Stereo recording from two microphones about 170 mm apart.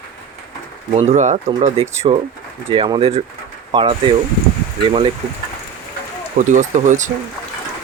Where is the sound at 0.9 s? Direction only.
35° right (ahead or behind).